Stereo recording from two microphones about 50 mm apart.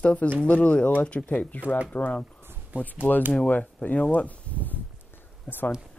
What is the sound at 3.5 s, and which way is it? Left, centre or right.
Speech, left.